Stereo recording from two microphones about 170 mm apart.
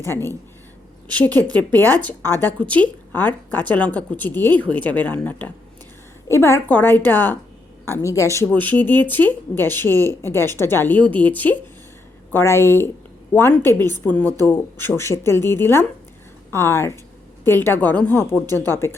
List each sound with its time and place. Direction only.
1.5 s a woman's voice: 10° left (ahead or behind)